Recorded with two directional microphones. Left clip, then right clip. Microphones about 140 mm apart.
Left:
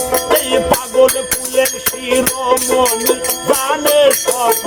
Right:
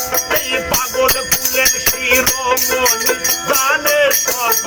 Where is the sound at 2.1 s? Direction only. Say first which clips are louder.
Left 1 dB; 35° left (ahead or behind).